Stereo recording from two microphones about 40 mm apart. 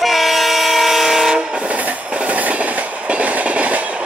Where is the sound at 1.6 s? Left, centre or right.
Right.